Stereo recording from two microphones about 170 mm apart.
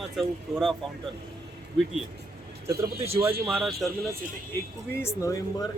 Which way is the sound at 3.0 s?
35° right (ahead or behind).